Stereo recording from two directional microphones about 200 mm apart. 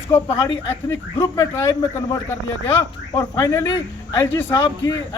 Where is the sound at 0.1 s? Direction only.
15° left (ahead or behind).